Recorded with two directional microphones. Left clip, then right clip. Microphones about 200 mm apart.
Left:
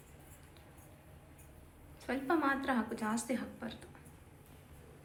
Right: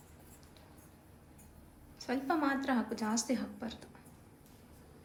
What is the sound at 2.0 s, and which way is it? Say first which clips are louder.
A woman's voice: even; 15° right (ahead or behind).